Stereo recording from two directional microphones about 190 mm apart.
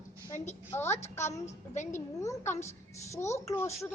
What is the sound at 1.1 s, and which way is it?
Speech, 15° left (ahead or behind).